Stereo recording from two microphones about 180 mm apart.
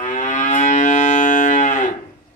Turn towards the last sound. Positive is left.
turn(degrees=45)  # may be behind; listen again after turning